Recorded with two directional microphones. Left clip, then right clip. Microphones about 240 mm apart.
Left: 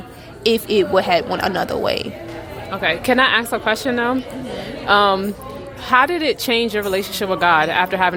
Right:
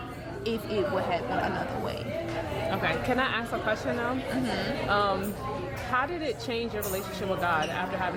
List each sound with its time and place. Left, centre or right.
0.4 s a woman's voice: left